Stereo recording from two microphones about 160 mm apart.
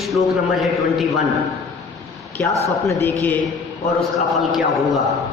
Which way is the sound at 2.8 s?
10° left (ahead or behind).